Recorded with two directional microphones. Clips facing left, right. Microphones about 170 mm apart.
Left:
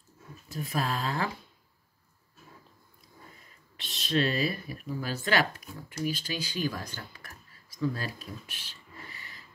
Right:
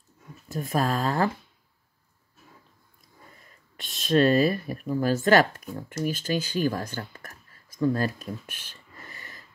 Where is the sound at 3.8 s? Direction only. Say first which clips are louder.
Right 7 dB; 45° right (ahead or behind).